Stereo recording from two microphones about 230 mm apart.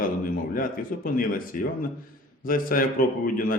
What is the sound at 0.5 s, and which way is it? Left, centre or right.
A man's voice, left.